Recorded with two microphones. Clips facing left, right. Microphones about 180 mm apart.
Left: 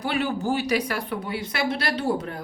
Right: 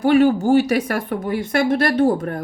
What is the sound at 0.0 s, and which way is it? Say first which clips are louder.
Speech: right 11 dB; 45° right (ahead or behind).